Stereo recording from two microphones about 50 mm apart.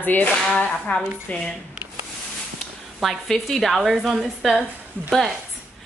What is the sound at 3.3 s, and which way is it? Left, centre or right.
A woman's voice, centre.